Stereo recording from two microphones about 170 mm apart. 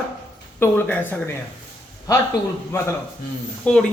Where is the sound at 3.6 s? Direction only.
5° left (ahead or behind).